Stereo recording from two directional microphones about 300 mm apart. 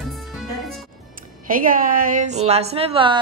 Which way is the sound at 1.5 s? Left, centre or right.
Right.